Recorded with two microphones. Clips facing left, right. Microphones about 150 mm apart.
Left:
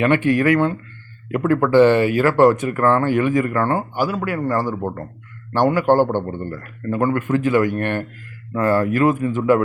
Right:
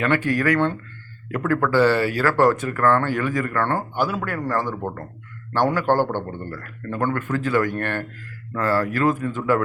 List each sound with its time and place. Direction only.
0.0 s a man's voice: 20° left (ahead or behind)